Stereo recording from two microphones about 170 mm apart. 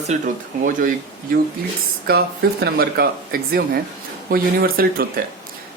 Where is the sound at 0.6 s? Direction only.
55° right (ahead or behind).